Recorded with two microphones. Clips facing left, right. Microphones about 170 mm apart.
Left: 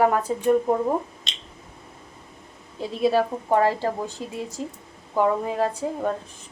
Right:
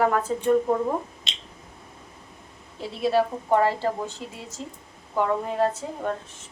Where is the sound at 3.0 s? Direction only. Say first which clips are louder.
Left 1 dB; 15° left (ahead or behind).